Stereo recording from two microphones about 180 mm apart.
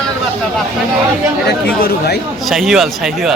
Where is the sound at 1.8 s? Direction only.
60° left (ahead or behind).